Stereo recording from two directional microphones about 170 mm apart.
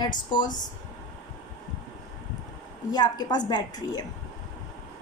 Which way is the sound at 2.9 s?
25° left (ahead or behind).